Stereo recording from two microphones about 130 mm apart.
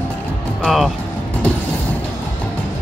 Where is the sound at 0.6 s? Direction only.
Centre (ahead or behind).